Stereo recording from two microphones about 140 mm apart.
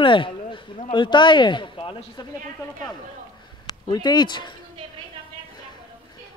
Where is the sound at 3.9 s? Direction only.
30° left (ahead or behind).